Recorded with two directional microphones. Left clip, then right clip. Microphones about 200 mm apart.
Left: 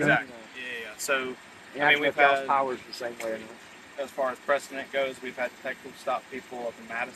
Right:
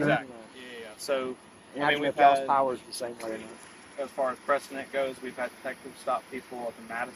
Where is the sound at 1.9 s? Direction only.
10° right (ahead or behind).